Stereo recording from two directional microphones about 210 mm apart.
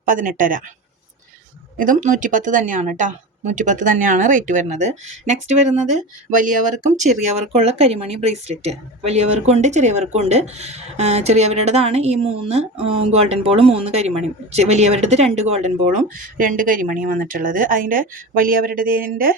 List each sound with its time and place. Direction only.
0.0 s speech: 40° right (ahead or behind)
1.8 s speech: 40° right (ahead or behind)